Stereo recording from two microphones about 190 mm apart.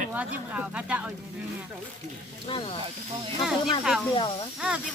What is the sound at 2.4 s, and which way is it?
Speech, 30° left (ahead or behind).